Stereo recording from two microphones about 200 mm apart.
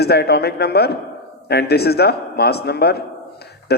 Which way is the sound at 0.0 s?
55° left (ahead or behind).